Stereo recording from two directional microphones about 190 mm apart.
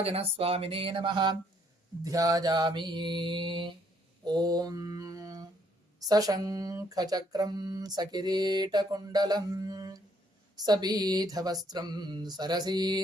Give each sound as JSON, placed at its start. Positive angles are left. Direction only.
{"t": 0.0, "sound": "speech", "side_deg": -30}
{"t": 4.3, "sound": "mantra", "side_deg": -20}
{"t": 6.1, "sound": "speech", "side_deg": -20}